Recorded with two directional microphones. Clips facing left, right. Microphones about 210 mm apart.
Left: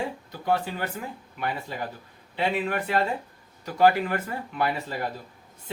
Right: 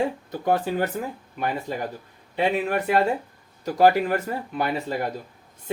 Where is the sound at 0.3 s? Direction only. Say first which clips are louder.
Right 4 dB; 50° right (ahead or behind).